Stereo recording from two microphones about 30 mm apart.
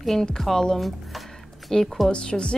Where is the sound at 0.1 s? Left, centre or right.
Centre.